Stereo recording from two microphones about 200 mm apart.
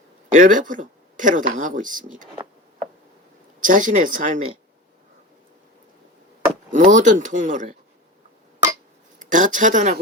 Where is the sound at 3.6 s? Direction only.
40° right (ahead or behind).